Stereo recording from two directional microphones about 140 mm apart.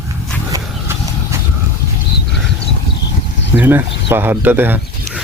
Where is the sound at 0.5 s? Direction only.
20° right (ahead or behind).